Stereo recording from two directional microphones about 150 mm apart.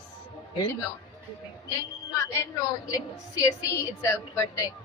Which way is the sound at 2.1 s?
20° left (ahead or behind).